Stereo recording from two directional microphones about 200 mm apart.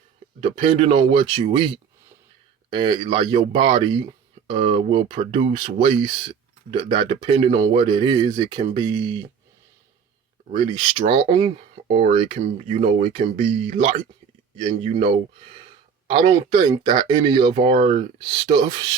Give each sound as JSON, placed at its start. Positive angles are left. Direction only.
{"t": 0.3, "sound": "speech", "side_deg": -25}
{"t": 10.5, "sound": "speech", "side_deg": -25}